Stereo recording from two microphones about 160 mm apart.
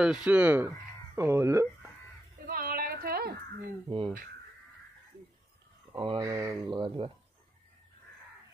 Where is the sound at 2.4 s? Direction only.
65° right (ahead or behind).